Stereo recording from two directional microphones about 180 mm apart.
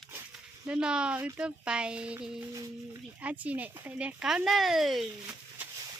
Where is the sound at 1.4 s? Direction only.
5° right (ahead or behind).